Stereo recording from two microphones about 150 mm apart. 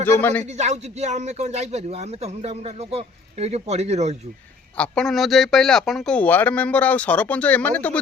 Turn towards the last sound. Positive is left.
turn(degrees=10)  # may be behind; listen again after turning